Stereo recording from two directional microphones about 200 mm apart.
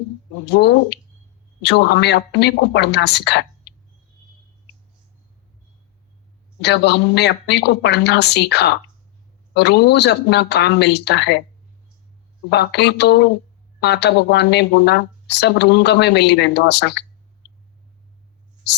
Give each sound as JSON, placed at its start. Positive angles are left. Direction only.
{"t": 0.4, "sound": "speech", "side_deg": 60}
{"t": 3.7, "sound": "a sound", "side_deg": 55}
{"t": 6.6, "sound": "speech", "side_deg": 55}
{"t": 12.5, "sound": "speech", "side_deg": 55}